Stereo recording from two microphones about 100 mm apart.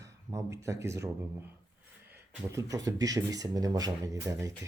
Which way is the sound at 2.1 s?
30° right (ahead or behind).